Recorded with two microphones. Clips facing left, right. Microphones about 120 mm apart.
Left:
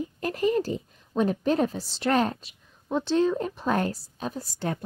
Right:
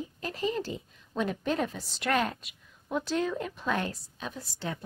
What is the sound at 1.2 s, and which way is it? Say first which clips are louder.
A woman's voice: left 6 dB; 35° left (ahead or behind).